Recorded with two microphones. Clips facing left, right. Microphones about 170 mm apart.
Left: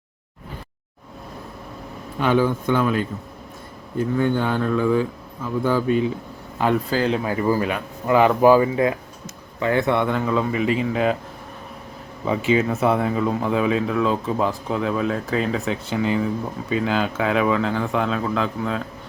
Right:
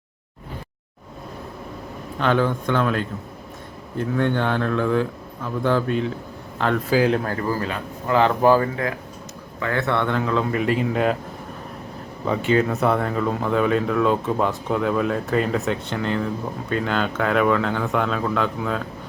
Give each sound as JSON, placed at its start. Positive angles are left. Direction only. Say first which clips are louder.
{"t": 2.1, "sound": "speech", "louder": "left 1 dB", "side_deg": 10}
{"t": 6.9, "sound": "speech", "louder": "right 3 dB", "side_deg": -5}
{"t": 7.3, "sound": "speech", "louder": "left 4 dB", "side_deg": 15}
{"t": 12.2, "sound": "speech", "louder": "even", "side_deg": 5}